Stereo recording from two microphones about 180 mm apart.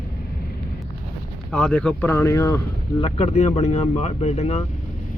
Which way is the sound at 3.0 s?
35° left (ahead or behind).